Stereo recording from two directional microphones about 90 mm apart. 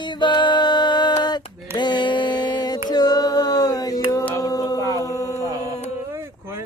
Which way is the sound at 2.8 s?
50° left (ahead or behind).